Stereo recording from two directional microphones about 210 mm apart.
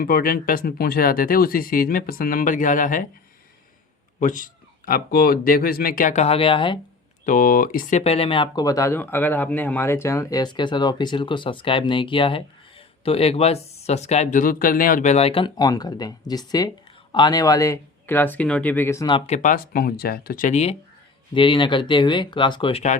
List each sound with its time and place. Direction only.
0.0 s speech: 45° left (ahead or behind)
4.2 s speech: 35° left (ahead or behind)
7.3 s speech: 40° left (ahead or behind)